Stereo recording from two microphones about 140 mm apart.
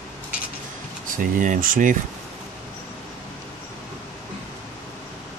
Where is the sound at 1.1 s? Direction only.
75° right (ahead or behind).